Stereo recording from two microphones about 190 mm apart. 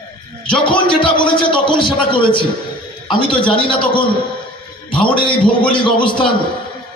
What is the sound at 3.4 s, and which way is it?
A man's voice, 25° left (ahead or behind).